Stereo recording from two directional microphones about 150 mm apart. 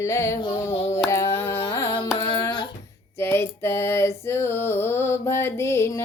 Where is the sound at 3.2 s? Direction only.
15° left (ahead or behind).